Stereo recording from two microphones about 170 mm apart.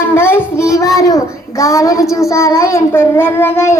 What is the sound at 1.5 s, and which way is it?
Child singing, 20° left (ahead or behind).